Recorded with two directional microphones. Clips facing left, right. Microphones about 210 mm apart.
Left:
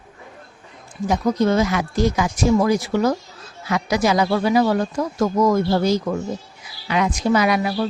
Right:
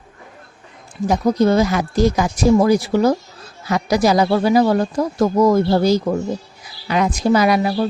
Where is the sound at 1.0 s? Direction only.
35° right (ahead or behind).